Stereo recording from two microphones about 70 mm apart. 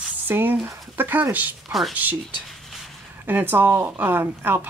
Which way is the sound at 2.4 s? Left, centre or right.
Centre.